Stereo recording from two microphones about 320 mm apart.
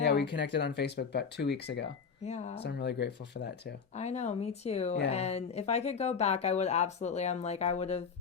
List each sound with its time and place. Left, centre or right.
0.0 s speech: left
2.2 s speech: left
2.6 s speech: left
3.9 s speech: left